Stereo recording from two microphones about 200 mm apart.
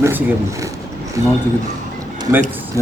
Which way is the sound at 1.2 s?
15° right (ahead or behind).